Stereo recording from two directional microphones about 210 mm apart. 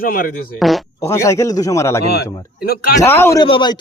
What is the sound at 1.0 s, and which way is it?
Speech, 15° left (ahead or behind).